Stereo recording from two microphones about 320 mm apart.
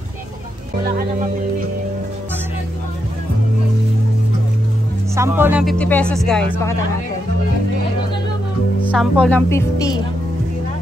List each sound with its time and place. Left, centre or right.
0.8 s speech: right
5.1 s speech: centre
8.8 s speech: centre